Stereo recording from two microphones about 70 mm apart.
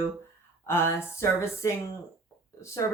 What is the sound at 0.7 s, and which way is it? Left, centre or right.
Speech, left.